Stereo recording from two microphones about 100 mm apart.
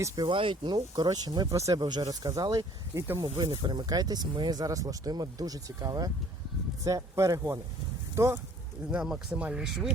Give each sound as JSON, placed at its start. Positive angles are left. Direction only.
{"t": 0.2, "sound": "speech", "side_deg": -55}
{"t": 2.9, "sound": "speech", "side_deg": -30}
{"t": 3.3, "sound": "speech", "side_deg": -55}
{"t": 8.9, "sound": "speech", "side_deg": -10}